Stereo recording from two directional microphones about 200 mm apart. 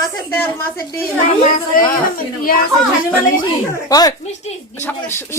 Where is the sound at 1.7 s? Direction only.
45° left (ahead or behind).